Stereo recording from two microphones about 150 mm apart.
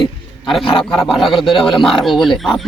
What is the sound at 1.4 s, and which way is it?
Speech, 35° left (ahead or behind).